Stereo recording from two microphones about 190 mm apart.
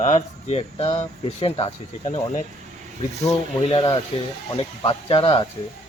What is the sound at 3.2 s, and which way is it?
Speech, 20° left (ahead or behind).